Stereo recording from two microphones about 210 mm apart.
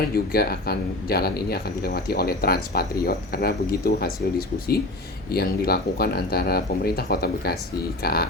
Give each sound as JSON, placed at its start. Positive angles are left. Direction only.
{"t": 0.3, "sound": "speech", "side_deg": 45}